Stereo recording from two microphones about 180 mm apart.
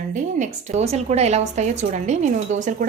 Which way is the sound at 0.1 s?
45° right (ahead or behind).